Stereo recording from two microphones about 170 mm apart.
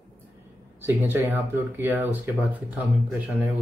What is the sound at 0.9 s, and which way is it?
Speech, 10° right (ahead or behind).